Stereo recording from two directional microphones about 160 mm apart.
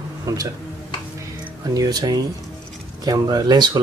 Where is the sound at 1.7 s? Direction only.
25° right (ahead or behind).